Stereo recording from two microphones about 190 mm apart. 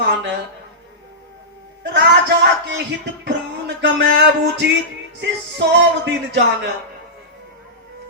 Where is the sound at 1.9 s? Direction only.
65° right (ahead or behind).